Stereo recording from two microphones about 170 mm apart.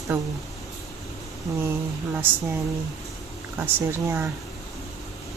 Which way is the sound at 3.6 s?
15° right (ahead or behind).